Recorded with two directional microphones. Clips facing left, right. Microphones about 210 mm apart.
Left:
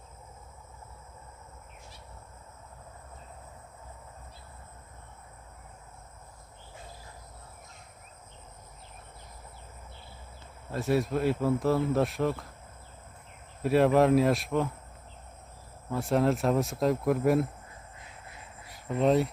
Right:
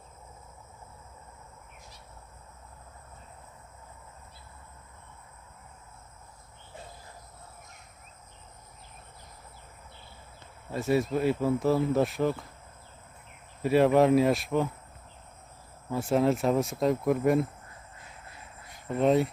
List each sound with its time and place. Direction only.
10.7 s speech: centre (ahead or behind)
13.6 s speech: centre (ahead or behind)
15.9 s speech: centre (ahead or behind)
18.7 s speech: centre (ahead or behind)